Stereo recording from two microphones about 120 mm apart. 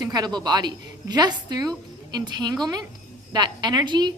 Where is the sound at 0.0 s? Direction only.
35° right (ahead or behind).